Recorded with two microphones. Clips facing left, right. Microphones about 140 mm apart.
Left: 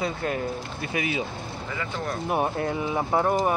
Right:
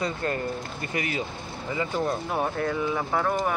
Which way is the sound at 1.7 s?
20° right (ahead or behind).